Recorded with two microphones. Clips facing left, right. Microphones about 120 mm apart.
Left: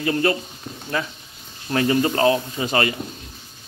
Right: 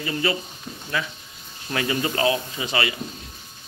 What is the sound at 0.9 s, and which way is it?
A man's voice, 40° left (ahead or behind).